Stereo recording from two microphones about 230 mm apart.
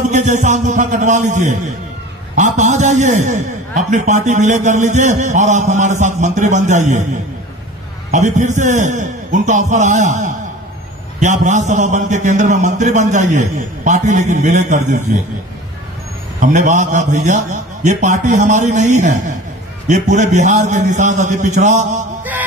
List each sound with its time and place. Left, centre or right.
0.1 s a man's voice: right
8.1 s a man's voice: right
16.3 s a man's voice: right